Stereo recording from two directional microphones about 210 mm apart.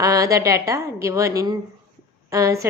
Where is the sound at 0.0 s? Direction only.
15° right (ahead or behind).